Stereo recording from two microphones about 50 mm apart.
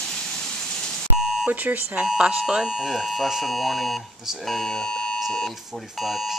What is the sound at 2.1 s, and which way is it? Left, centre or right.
Speech, centre.